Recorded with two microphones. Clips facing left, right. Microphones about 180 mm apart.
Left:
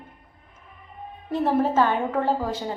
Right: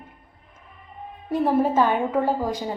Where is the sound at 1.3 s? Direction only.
15° right (ahead or behind).